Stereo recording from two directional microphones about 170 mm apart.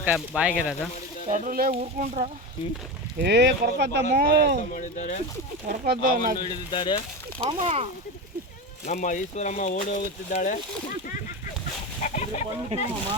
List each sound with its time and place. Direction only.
0.0 s speech: 10° right (ahead or behind)
1.3 s speech: 60° right (ahead or behind)
1.8 s speech: 45° right (ahead or behind)
3.2 s speech: 85° right
4.1 s speech: 65° right (ahead or behind)
4.7 s speech: 50° left (ahead or behind)
5.6 s speech: 55° right (ahead or behind)
6.7 s speech: 30° left (ahead or behind)
7.3 s speech: 30° right (ahead or behind)
8.9 s speech: 45° left (ahead or behind)
12.0 s chicken: 45° left (ahead or behind)
12.7 s speech: 40° right (ahead or behind)